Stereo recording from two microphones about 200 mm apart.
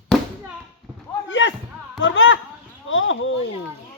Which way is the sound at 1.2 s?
70° left (ahead or behind).